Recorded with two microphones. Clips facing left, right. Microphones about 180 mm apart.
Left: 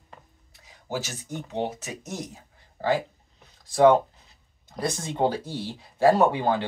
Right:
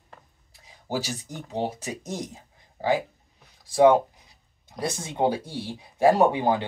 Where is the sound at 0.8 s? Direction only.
35° right (ahead or behind).